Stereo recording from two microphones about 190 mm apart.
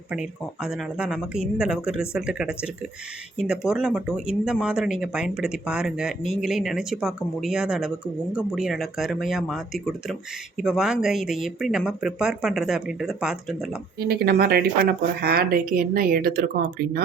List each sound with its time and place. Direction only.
0.1 s speech: 5° right (ahead or behind)
14.1 s speech: 55° right (ahead or behind)